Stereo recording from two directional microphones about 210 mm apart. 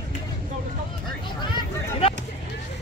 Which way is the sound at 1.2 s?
25° left (ahead or behind).